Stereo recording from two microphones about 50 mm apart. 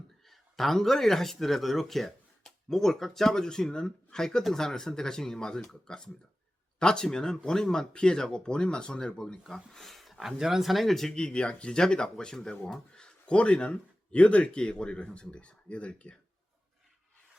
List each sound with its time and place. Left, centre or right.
0.3 s speech: centre
11.1 s speech: centre